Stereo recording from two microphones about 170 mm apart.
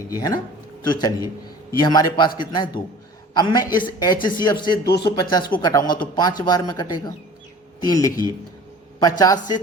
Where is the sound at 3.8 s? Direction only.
25° left (ahead or behind).